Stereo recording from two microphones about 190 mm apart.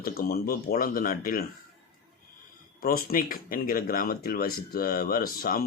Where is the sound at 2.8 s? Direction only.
50° left (ahead or behind).